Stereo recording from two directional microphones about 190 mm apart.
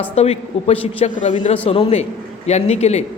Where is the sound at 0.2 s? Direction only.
30° left (ahead or behind).